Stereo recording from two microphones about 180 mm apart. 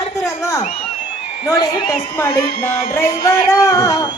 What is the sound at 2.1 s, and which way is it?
A woman's voice, 15° left (ahead or behind).